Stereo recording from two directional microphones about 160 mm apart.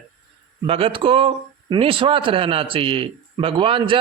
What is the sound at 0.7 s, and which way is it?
A man's voice, 35° right (ahead or behind).